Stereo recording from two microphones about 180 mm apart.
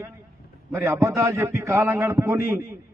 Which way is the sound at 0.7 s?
15° right (ahead or behind).